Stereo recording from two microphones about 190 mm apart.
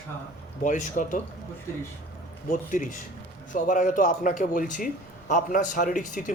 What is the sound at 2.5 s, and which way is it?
A man's voice, 45° left (ahead or behind).